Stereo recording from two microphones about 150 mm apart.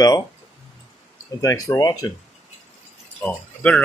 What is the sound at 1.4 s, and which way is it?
Speech, 20° left (ahead or behind).